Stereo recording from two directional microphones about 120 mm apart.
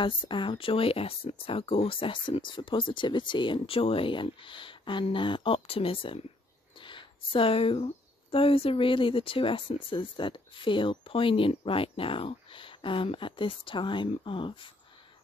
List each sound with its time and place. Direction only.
0.0 s speech: 45° left (ahead or behind)